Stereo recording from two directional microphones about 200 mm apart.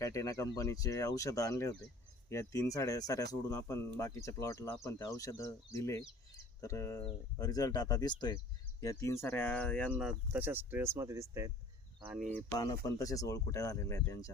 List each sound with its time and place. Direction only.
0.0 s speech: 15° left (ahead or behind); by 12.3 s 5° right (ahead or behind)
12.3 s speech: 15° left (ahead or behind)